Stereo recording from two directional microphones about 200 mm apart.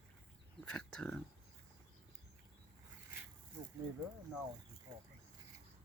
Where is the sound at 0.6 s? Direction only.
5° left (ahead or behind).